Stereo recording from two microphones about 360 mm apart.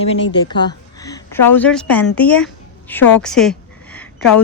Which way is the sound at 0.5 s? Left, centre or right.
Centre.